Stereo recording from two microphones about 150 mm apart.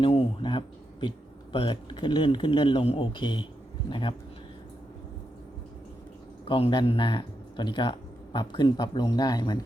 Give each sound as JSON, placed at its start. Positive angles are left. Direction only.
{"t": 0.0, "sound": "a man's voice", "side_deg": 40}
{"t": 6.4, "sound": "speech", "side_deg": 35}